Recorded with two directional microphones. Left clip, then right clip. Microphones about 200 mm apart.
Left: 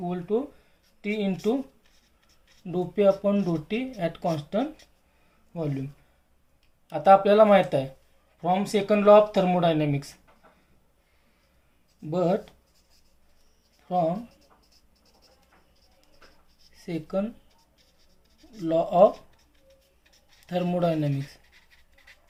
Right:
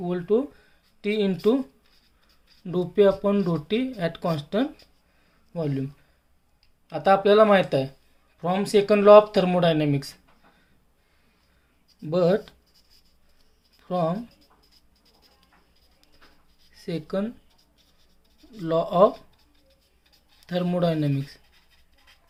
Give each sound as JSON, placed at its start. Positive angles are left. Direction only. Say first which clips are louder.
{"t": 0.0, "sound": "speech", "louder": "right 4 dB", "side_deg": -40}
{"t": 2.6, "sound": "speech", "louder": "right 2 dB", "side_deg": -30}
{"t": 6.9, "sound": "speech", "louder": "left 1 dB", "side_deg": -30}
{"t": 12.1, "sound": "speech", "louder": "right 4 dB", "side_deg": -35}
{"t": 13.8, "sound": "speech", "louder": "left 1 dB", "side_deg": -35}
{"t": 16.7, "sound": "speech", "louder": "right 1 dB", "side_deg": -30}
{"t": 18.5, "sound": "speech", "louder": "even", "side_deg": -30}
{"t": 20.5, "sound": "speech", "louder": "right 1 dB", "side_deg": -25}